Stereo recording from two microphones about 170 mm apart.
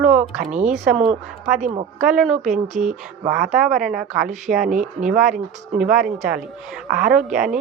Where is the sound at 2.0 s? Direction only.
5° right (ahead or behind).